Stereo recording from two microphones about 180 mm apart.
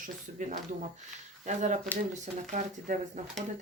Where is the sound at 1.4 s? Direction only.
40° right (ahead or behind).